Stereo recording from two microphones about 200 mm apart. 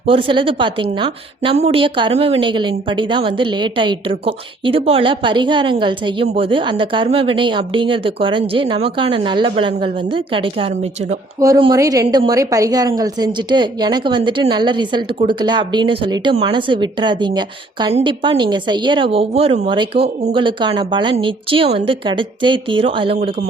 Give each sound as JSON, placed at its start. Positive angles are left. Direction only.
{"t": 0.0, "sound": "a woman's voice", "side_deg": -25}